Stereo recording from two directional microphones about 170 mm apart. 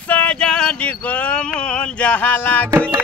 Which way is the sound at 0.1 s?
5° left (ahead or behind).